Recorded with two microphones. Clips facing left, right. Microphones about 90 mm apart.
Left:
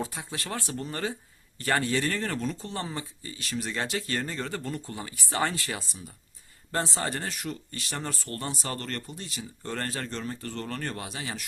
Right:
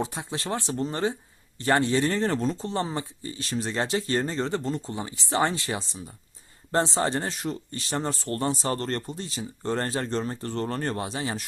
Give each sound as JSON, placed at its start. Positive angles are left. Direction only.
{"t": 0.0, "sound": "speech", "side_deg": -25}